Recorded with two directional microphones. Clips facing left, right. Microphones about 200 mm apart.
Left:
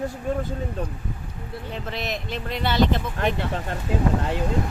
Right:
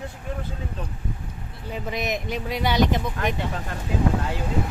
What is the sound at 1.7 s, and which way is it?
Speech, 15° right (ahead or behind).